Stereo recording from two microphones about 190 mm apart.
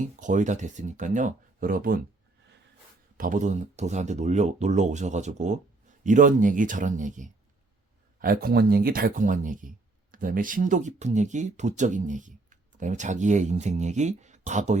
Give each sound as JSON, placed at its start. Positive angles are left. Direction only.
{"t": 0.0, "sound": "speech", "side_deg": -40}
{"t": 3.2, "sound": "speech", "side_deg": -40}